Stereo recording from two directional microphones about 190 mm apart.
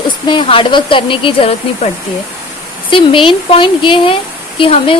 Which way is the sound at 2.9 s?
25° left (ahead or behind).